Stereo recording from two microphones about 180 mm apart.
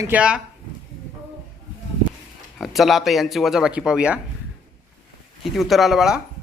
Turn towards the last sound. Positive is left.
turn(degrees=-5)  # may be behind; listen again after turning